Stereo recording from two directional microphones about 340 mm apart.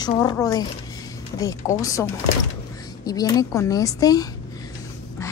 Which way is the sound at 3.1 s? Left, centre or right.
Centre.